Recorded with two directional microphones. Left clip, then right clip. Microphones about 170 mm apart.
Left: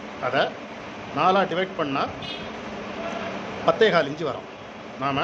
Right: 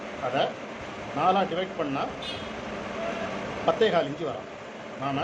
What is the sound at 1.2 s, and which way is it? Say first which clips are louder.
Speech: left 4 dB; 30° left (ahead or behind).